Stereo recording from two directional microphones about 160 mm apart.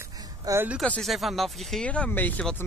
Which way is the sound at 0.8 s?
5° left (ahead or behind).